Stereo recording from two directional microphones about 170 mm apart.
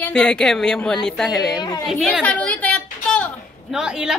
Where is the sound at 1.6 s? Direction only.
25° left (ahead or behind).